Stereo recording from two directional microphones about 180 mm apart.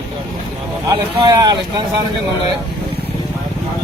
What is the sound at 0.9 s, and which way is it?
Speech, 20° right (ahead or behind).